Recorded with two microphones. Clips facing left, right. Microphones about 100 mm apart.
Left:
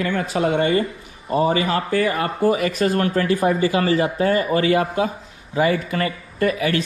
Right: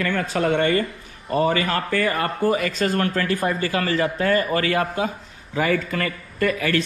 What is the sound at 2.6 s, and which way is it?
Speech, 30° left (ahead or behind).